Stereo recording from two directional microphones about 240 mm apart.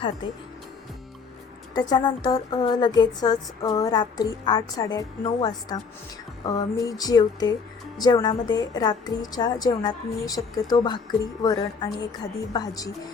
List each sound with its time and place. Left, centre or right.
0.2 s speech: left
1.7 s a woman's voice: centre